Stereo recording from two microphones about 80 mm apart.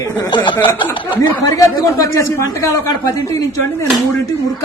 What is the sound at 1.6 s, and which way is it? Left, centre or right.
Speech, left.